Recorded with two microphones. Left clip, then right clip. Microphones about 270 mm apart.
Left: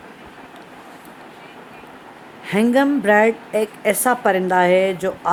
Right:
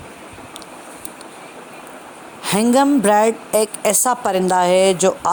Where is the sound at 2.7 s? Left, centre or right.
Centre.